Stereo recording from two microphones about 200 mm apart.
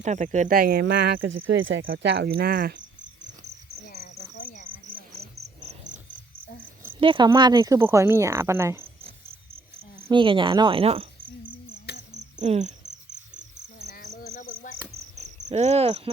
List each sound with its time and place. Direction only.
0.0 s speech: 35° right (ahead or behind); by 1.2 s 55° right (ahead or behind)
1.2 s speech: 80° right
1.9 s cricket: 55° right (ahead or behind)
3.8 s cricket: 50° left (ahead or behind)
5.6 s cricket: 35° right (ahead or behind)
7.0 s speech: 25° right (ahead or behind)
10.0 s speech: 25° right (ahead or behind)
11.9 s cricket: 55° left (ahead or behind)
12.4 s cricket: 35° right (ahead or behind)
13.9 s cricket: 45° left (ahead or behind)
15.1 s cricket: 35° right (ahead or behind)